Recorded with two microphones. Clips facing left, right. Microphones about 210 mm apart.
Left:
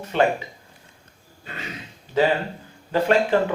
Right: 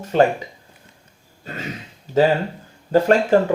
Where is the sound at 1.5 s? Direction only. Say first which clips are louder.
Right 5 dB; 40° right (ahead or behind).